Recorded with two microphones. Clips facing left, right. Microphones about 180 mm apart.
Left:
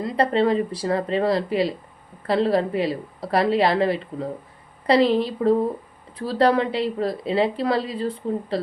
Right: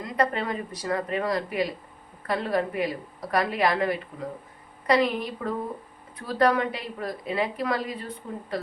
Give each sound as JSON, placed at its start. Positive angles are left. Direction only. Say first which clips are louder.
{"t": 0.0, "sound": "a woman's voice", "louder": "left 7 dB", "side_deg": 30}